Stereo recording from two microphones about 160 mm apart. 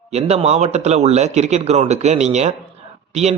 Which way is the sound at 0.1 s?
40° right (ahead or behind).